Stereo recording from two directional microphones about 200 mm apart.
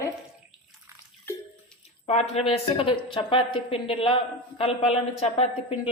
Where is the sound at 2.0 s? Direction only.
30° left (ahead or behind).